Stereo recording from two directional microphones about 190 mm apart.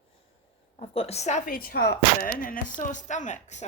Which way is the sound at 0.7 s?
30° left (ahead or behind).